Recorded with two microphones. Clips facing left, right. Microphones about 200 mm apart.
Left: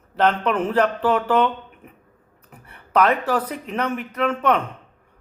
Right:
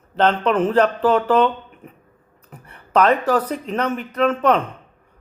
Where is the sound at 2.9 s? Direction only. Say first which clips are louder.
Right 3 dB; 10° left (ahead or behind).